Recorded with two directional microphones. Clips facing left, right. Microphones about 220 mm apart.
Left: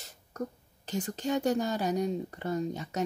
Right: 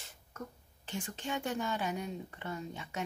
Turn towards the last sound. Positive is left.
turn(degrees=40)  # may be behind; listen again after turning